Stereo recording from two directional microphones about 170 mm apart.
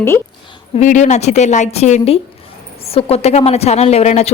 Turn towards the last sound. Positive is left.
turn(degrees=40)  # may be behind; listen again after turning